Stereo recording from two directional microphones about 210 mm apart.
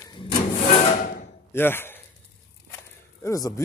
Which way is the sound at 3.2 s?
15° left (ahead or behind).